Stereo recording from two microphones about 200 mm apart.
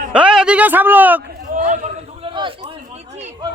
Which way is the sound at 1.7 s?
35° right (ahead or behind).